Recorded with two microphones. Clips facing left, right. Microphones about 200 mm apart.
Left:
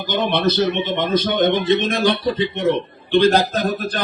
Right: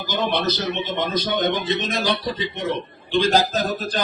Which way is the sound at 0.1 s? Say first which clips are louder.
Left 4 dB; 55° left (ahead or behind).